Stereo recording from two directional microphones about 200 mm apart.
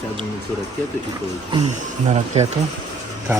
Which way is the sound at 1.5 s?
35° right (ahead or behind).